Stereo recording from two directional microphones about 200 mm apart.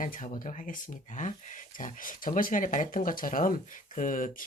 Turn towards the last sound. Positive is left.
turn(degrees=40)  # may be behind; listen again after turning